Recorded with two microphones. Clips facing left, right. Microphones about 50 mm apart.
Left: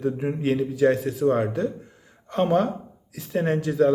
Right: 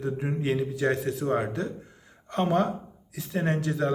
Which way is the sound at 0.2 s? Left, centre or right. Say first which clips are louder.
Left 4 dB; centre.